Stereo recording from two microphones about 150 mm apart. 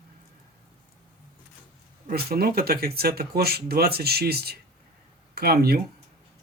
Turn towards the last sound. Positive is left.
turn(degrees=-90)